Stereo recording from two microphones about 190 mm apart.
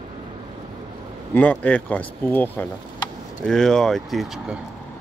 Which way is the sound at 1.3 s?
5° left (ahead or behind).